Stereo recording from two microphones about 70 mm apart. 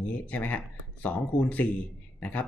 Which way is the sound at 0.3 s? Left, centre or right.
Left.